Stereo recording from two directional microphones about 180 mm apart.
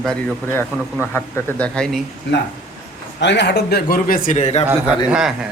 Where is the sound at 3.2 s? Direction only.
75° left (ahead or behind); by 4.6 s 40° left (ahead or behind).